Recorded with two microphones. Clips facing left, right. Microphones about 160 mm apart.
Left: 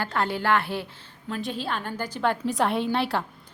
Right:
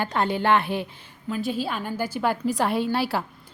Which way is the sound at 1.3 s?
5° right (ahead or behind).